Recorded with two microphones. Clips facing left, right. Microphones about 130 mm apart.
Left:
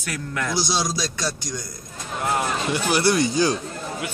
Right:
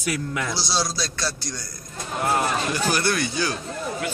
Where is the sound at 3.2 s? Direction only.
35° left (ahead or behind).